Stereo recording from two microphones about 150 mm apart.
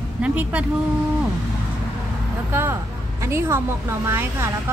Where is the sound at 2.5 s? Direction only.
15° right (ahead or behind).